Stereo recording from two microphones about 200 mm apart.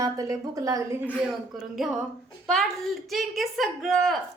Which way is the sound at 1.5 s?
Centre (ahead or behind).